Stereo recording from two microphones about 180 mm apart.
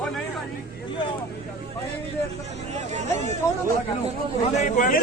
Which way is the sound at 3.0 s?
40° right (ahead or behind).